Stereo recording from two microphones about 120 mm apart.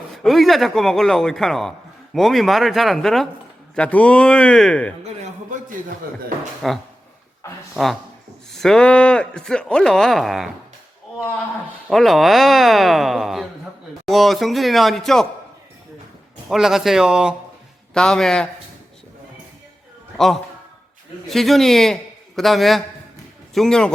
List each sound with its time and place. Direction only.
0.1 s speech: centre (ahead or behind)
5.0 s a sound: 80° right
6.6 s speech: centre (ahead or behind)
11.9 s speech: centre (ahead or behind)
16.5 s speech: 5° right (ahead or behind)
17.9 s speech: 5° left (ahead or behind)
20.1 s a man's voice: centre (ahead or behind)